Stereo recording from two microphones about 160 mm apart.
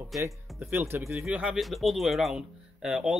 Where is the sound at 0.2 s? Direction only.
10° right (ahead or behind).